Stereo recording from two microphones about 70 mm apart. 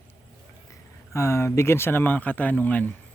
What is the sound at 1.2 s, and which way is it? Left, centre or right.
Speech, left.